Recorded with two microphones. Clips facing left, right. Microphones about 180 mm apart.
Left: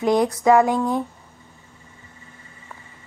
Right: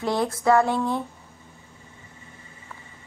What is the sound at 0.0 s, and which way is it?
A woman's voice, 15° left (ahead or behind).